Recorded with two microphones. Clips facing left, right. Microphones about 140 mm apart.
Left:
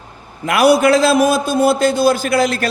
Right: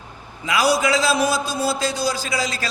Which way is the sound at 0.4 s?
60° left (ahead or behind).